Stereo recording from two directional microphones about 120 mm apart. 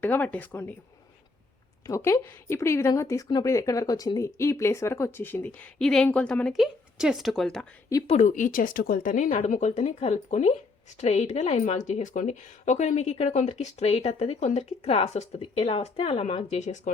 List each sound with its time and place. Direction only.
0.0 s speech: 15° left (ahead or behind)
1.9 s speech: 25° left (ahead or behind)
5.8 s speech: 5° left (ahead or behind)
8.0 s a woman's voice: 75° left (ahead or behind)
11.6 s speech: 80° left